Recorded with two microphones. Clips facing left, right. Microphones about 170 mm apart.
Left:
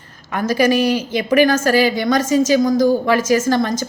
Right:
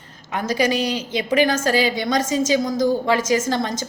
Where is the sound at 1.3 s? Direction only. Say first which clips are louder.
Left 4 dB; 25° right (ahead or behind).